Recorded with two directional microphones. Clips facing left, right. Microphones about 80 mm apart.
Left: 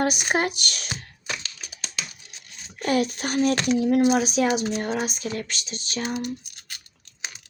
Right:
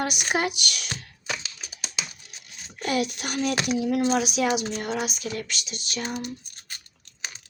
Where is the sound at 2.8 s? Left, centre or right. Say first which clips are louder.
Left 3 dB; left.